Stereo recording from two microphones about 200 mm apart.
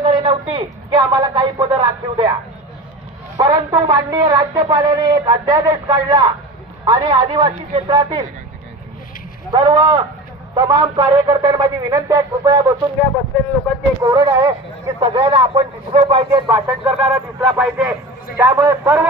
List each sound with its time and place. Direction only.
0.0 s speech: 25° right (ahead or behind)
3.3 s speech: 20° right (ahead or behind)
9.5 s speech: 20° right (ahead or behind)
14.0 s speech: 20° right (ahead or behind)
16.6 s speech: 5° right (ahead or behind)
18.4 s a man's voice: 15° right (ahead or behind)